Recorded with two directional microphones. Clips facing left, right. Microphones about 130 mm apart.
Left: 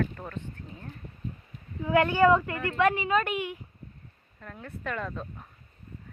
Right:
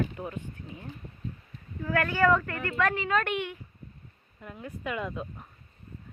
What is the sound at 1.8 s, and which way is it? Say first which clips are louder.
A woman's voice: left 4 dB; 20° left (ahead or behind).